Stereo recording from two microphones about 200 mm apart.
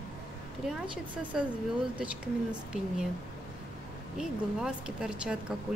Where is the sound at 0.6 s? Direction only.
5° right (ahead or behind).